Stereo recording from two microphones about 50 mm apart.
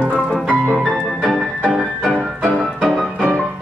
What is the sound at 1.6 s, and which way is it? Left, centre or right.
Music, right.